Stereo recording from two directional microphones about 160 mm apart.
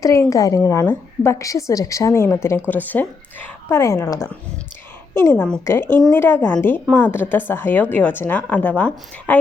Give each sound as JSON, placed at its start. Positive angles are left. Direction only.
{"t": 0.0, "sound": "a woman's voice", "side_deg": 20}